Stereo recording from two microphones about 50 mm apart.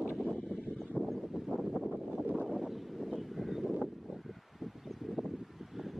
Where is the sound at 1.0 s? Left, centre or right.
Right.